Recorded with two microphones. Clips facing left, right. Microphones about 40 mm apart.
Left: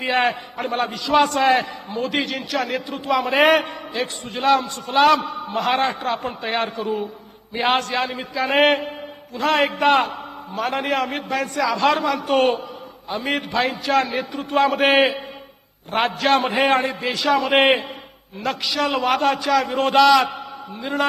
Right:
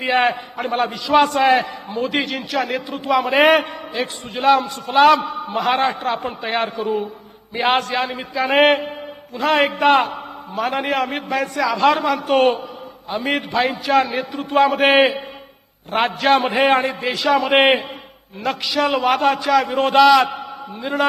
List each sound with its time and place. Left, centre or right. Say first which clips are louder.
0.0 s a man's voice: right 2 dB; centre